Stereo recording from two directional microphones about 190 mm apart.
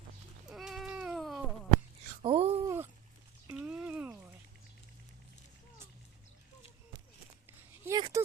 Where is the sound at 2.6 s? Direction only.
15° right (ahead or behind).